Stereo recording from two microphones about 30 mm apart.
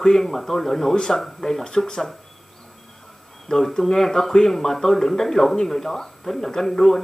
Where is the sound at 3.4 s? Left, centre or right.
Centre.